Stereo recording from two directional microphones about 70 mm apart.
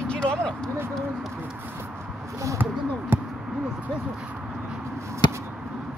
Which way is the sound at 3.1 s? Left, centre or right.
Right.